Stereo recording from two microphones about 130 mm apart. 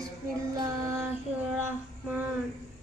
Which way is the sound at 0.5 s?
30° right (ahead or behind).